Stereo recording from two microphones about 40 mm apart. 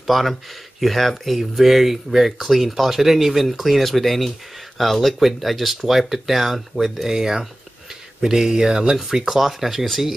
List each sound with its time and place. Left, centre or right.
0.0 s speech: centre
8.9 s speech: centre